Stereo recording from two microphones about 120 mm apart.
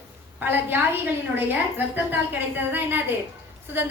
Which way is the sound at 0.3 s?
15° right (ahead or behind).